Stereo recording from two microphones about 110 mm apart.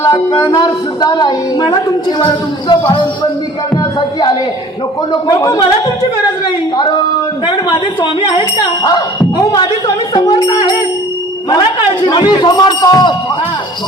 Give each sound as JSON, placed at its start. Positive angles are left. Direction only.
{"t": 0.3, "sound": "a woman's voice", "side_deg": 40}
{"t": 5.3, "sound": "a woman's voice", "side_deg": 35}
{"t": 6.7, "sound": "a woman's voice", "side_deg": 45}
{"t": 8.5, "sound": "a woman's voice", "side_deg": 35}
{"t": 12.0, "sound": "a woman's voice", "side_deg": 40}